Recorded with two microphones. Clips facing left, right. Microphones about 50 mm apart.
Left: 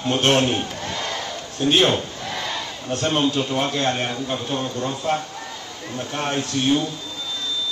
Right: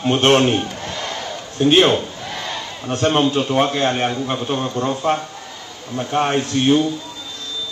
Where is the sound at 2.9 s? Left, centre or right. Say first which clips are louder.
Right 4 dB; right.